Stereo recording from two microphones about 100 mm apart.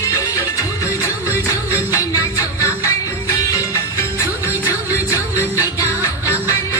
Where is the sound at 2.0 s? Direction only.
30° left (ahead or behind).